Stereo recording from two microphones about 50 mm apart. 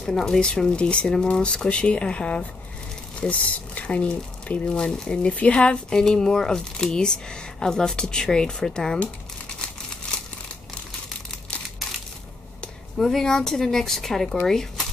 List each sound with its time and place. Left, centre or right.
0.0 s speech: centre
12.9 s speech: centre